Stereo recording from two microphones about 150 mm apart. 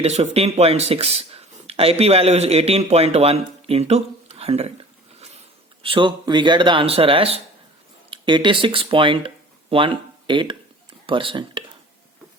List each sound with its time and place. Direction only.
0.0 s speech: 45° right (ahead or behind)
5.8 s speech: 35° right (ahead or behind)